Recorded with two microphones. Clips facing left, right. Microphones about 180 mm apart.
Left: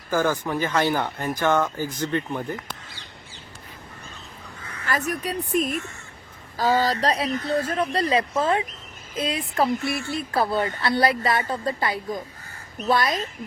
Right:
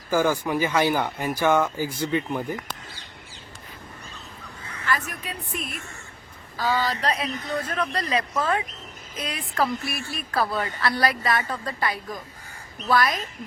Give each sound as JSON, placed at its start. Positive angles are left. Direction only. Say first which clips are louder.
{"t": 0.1, "sound": "speech", "louder": "right 1 dB", "side_deg": -10}
{"t": 4.9, "sound": "a woman's voice", "louder": "left 3 dB", "side_deg": 40}